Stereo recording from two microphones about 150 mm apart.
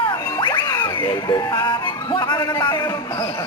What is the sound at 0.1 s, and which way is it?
Speech, 30° left (ahead or behind).